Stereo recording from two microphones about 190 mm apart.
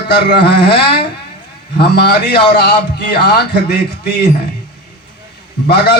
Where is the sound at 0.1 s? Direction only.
60° left (ahead or behind).